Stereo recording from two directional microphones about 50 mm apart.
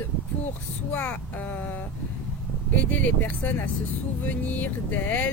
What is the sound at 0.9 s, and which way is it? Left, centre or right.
Speech, left.